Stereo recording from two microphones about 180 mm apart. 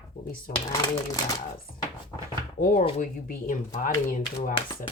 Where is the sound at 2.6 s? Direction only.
50° left (ahead or behind).